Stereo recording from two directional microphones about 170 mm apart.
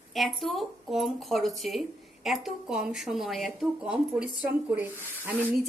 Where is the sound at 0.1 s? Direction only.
Centre (ahead or behind).